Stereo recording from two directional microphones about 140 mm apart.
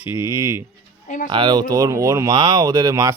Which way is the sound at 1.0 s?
65° left (ahead or behind).